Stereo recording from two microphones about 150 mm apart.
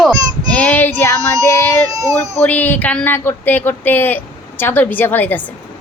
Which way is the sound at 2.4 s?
10° left (ahead or behind).